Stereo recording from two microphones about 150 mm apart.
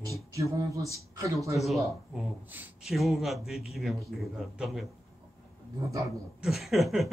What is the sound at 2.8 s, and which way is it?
Chuckle, centre (ahead or behind).